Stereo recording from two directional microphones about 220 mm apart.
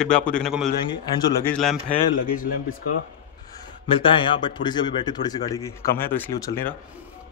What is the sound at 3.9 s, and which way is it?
Speech, 25° left (ahead or behind).